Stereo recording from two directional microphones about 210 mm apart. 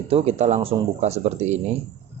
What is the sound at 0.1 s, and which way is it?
Speech, 30° right (ahead or behind).